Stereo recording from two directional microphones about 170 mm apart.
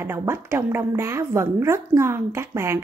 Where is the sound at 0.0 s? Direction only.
15° right (ahead or behind).